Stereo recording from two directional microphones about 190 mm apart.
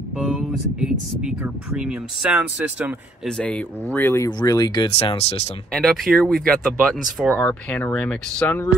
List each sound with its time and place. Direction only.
0.2 s speech: 5° right (ahead or behind)
3.3 s speech: 5° left (ahead or behind); by 5.4 s 30° left (ahead or behind)
5.7 s speech: 5° left (ahead or behind)